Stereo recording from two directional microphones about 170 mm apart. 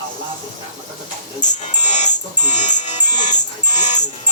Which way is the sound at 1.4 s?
45° left (ahead or behind).